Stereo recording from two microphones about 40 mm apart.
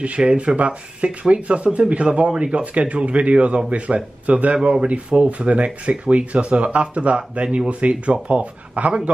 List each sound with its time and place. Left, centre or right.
0.2 s speech: right